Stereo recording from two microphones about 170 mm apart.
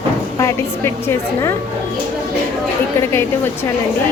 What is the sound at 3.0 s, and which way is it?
Speech, 15° left (ahead or behind).